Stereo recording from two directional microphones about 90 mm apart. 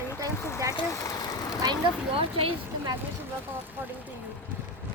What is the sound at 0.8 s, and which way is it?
Speech, 40° left (ahead or behind).